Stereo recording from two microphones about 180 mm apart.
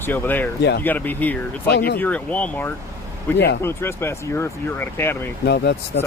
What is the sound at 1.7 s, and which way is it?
Speech, 60° left (ahead or behind).